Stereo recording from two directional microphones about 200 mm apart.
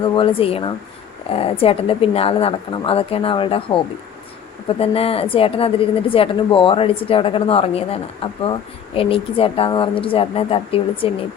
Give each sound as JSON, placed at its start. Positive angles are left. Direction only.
{"t": 0.0, "sound": "a woman's voice", "side_deg": 25}
{"t": 4.8, "sound": "a woman's voice", "side_deg": 30}